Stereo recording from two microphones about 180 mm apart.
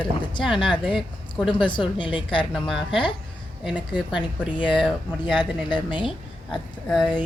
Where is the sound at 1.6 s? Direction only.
25° left (ahead or behind).